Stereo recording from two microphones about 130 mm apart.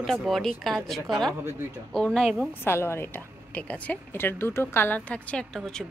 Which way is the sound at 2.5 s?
15° left (ahead or behind).